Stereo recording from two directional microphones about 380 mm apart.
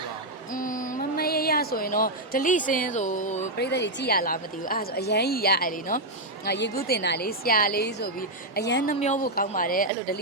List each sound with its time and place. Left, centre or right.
0.5 s a woman's voice: left